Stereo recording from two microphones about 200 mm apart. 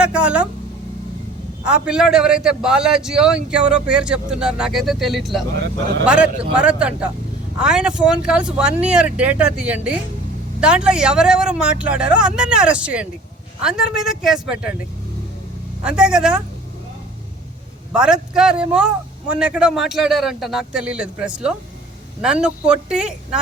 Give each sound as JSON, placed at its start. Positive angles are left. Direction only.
{"t": 0.0, "sound": "a man's voice", "side_deg": -5}
{"t": 1.6, "sound": "a man's voice", "side_deg": -5}
{"t": 5.5, "sound": "speech", "side_deg": -60}
{"t": 6.1, "sound": "a man's voice", "side_deg": -5}
{"t": 15.8, "sound": "a man's voice", "side_deg": -5}
{"t": 17.9, "sound": "a man's voice", "side_deg": -5}